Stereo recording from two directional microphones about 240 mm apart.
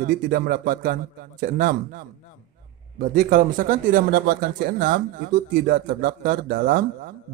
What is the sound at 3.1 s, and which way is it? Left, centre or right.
A man's voice, right.